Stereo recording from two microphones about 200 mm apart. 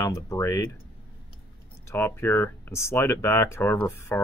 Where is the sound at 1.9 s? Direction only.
10° left (ahead or behind).